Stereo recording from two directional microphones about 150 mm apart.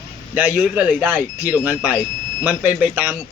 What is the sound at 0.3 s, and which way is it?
Speech, 10° right (ahead or behind).